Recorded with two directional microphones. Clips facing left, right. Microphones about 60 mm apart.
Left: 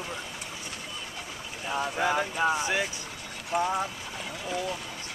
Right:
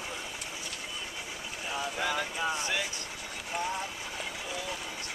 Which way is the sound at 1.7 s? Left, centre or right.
Left.